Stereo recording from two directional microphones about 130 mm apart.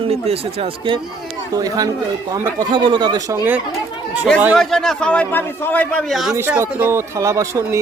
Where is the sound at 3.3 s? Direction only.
15° right (ahead or behind).